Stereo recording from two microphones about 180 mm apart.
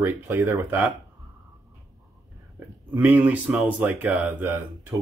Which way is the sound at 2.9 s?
10° right (ahead or behind).